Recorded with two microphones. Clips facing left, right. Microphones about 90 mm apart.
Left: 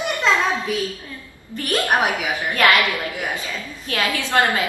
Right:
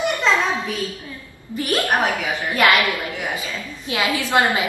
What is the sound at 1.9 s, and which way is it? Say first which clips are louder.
Speech: left 3 dB; 15° left (ahead or behind).